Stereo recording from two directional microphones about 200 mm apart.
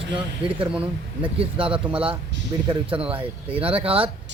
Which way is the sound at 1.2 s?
25° right (ahead or behind).